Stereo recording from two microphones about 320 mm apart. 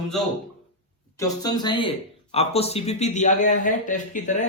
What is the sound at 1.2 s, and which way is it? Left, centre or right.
A man's voice, centre.